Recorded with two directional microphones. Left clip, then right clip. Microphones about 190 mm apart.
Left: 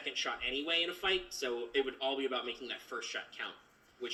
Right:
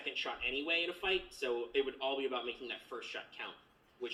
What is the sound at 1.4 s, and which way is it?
Speech, 45° left (ahead or behind).